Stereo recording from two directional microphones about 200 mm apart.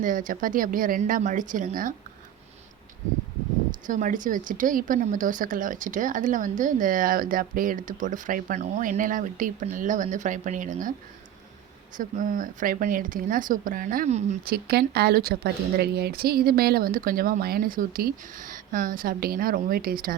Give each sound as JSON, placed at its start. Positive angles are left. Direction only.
{"t": 0.0, "sound": "speech", "side_deg": -40}
{"t": 3.8, "sound": "speech", "side_deg": -40}
{"t": 11.9, "sound": "speech", "side_deg": -40}
{"t": 14.4, "sound": "speech", "side_deg": -50}